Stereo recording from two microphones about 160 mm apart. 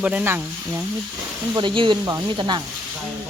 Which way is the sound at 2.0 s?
20° right (ahead or behind).